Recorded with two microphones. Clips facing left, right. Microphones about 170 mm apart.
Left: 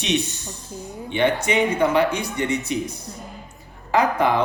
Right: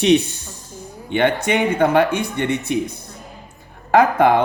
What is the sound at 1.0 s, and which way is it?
Speech, 60° right (ahead or behind).